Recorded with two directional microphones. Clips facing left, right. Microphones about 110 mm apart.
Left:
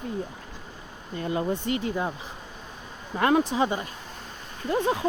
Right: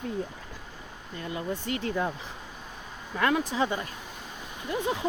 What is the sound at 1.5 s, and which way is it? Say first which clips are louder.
Speech: left 4 dB; 20° left (ahead or behind).